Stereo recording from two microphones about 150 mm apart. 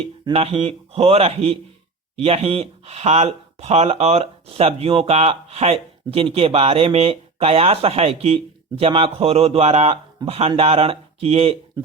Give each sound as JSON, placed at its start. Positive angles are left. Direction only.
{"t": 0.0, "sound": "speech", "side_deg": -40}